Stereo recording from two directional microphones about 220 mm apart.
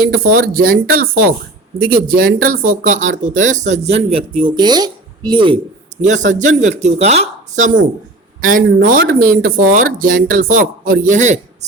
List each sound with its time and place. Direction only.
0.3 s speech: 40° right (ahead or behind); by 5.5 s 20° right (ahead or behind)
6.0 s speech: 35° right (ahead or behind)